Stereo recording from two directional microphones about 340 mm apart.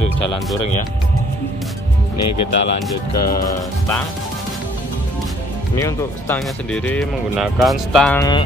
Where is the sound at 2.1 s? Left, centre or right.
Left.